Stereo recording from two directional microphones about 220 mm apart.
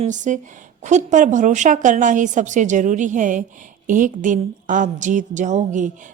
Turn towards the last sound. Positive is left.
turn(degrees=-35)  # may be behind; listen again after turning